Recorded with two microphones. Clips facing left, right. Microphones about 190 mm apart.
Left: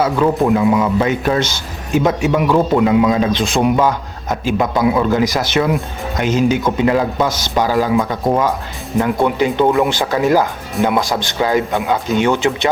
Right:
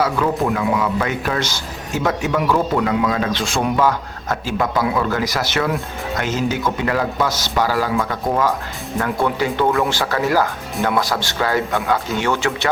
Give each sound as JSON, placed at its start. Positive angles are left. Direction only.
{"t": 0.4, "sound": "speech", "side_deg": 20}